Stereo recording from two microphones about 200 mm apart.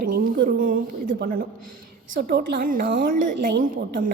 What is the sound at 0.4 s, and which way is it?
A woman's voice, 45° right (ahead or behind).